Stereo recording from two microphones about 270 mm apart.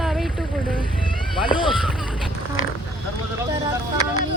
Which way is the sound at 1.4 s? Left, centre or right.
Centre.